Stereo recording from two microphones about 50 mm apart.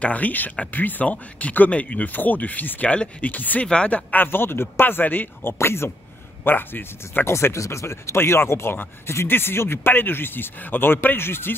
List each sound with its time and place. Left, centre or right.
0.0 s speech: left
2.9 s speech: left
3.3 s speech: left
3.6 s speech: left
4.1 s speech: left
5.6 s speech: left
6.4 s speech: left
7.2 s speech: left